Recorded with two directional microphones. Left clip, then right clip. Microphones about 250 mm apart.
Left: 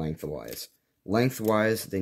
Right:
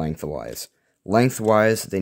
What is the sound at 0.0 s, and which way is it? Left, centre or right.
Speech, right.